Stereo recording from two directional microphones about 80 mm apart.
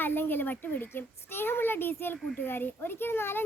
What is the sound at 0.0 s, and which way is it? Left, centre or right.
A woman's voice, left.